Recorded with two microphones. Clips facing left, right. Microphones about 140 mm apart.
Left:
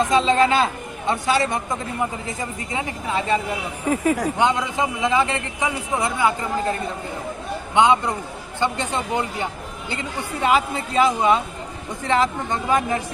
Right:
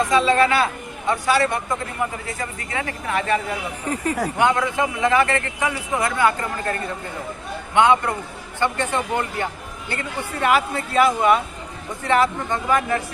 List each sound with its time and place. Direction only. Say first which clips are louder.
0.0 s speech: even; 25° left (ahead or behind)
3.8 s a man's voice: left 5 dB; 5° left (ahead or behind)
4.4 s a man's voice: right 1 dB; 20° left (ahead or behind)
7.8 s a man's voice: even; 15° left (ahead or behind)